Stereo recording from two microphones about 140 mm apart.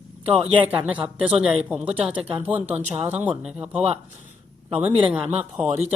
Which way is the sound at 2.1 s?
35° right (ahead or behind).